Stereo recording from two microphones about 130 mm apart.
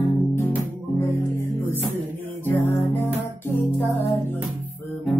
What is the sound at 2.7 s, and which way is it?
Music, 15° left (ahead or behind).